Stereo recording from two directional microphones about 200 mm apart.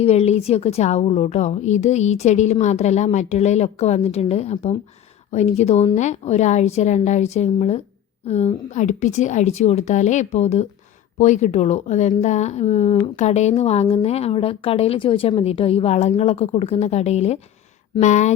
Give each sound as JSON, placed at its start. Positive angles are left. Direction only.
{"t": 0.0, "sound": "a woman's voice", "side_deg": 30}